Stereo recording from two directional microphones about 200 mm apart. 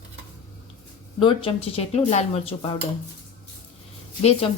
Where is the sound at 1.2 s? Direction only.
25° left (ahead or behind).